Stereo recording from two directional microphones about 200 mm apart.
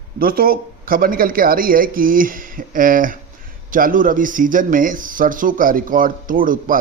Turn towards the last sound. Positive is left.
turn(degrees=-45)  # may be behind; listen again after turning